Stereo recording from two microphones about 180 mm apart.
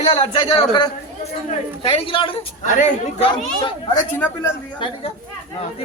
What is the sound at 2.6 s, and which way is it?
Speech, 40° left (ahead or behind).